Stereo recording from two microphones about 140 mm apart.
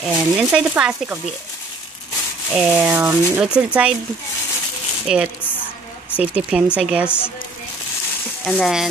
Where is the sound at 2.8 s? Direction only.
15° right (ahead or behind).